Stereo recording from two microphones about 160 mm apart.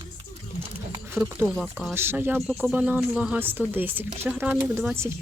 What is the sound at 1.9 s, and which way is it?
Speech, 15° right (ahead or behind).